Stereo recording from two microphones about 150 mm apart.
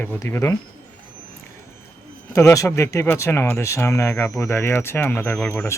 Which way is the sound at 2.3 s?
20° left (ahead or behind).